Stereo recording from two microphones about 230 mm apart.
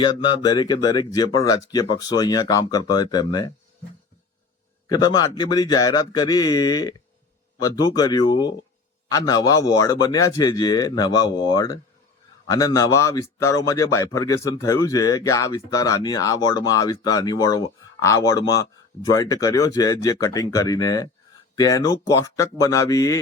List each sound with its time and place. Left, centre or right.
0.0 s speech: centre
4.9 s speech: centre